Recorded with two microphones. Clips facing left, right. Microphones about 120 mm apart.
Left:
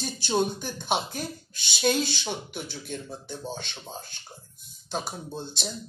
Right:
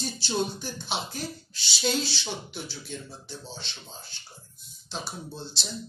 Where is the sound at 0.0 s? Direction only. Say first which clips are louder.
Left 3 dB; 55° left (ahead or behind).